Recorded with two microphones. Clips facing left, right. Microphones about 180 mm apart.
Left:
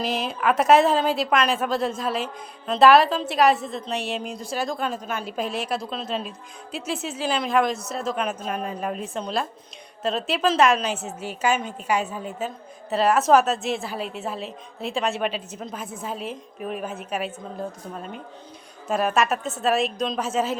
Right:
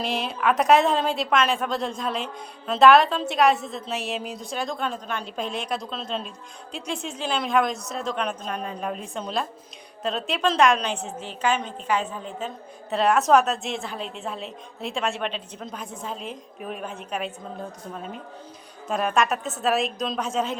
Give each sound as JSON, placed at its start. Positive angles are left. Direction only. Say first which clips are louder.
{"t": 0.0, "sound": "a woman's voice", "louder": "left 1 dB", "side_deg": 0}